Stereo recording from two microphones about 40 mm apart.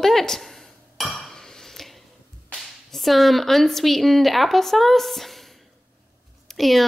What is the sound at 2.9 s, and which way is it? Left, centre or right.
Speech, centre.